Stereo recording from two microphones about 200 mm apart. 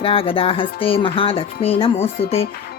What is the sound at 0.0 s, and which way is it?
Speech, 25° left (ahead or behind).